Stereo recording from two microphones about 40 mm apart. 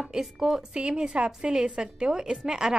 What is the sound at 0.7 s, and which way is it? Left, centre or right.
A woman's voice, right.